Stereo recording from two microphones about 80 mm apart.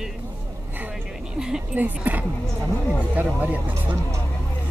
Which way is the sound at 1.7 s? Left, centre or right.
Centre.